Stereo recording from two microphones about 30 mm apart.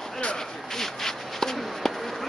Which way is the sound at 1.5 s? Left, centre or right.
Centre.